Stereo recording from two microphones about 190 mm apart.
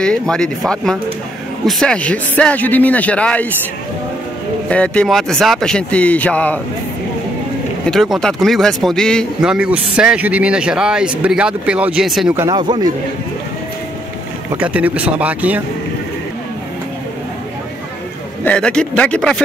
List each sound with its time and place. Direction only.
0.0 s speech: 5° left (ahead or behind)
4.6 s speech: 5° left (ahead or behind)
7.8 s speech: centre (ahead or behind)
12.4 s speech: 20° right (ahead or behind)
14.5 s speech: 10° right (ahead or behind)
18.4 s speech: 5° left (ahead or behind)